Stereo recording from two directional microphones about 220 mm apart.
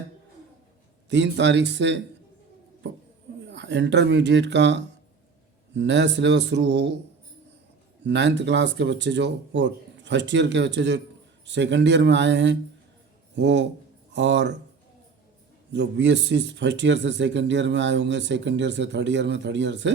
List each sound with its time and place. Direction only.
1.1 s speech: 55° right (ahead or behind)
3.4 s speech: 50° right (ahead or behind)
8.0 s speech: 55° right (ahead or behind)
15.7 s speech: 55° right (ahead or behind)